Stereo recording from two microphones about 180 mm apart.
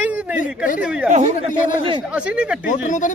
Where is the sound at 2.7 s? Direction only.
45° left (ahead or behind).